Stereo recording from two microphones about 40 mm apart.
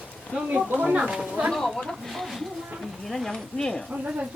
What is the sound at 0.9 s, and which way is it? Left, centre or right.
Speech, right.